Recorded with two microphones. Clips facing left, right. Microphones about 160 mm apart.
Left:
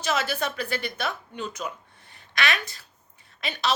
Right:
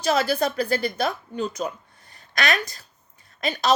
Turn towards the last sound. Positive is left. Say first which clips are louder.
# right 5 dB
turn(degrees=-40)  # may be behind; listen again after turning